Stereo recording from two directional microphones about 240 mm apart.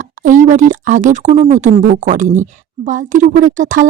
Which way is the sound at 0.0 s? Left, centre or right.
Right.